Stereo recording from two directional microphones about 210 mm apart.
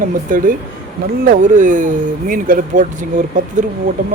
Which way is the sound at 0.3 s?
40° right (ahead or behind).